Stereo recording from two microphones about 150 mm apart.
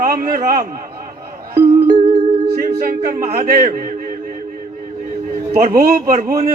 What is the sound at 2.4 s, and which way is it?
A capella, 80° right.